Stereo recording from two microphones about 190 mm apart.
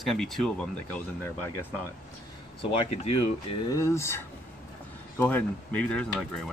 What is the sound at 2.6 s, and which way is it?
Speech, 30° left (ahead or behind).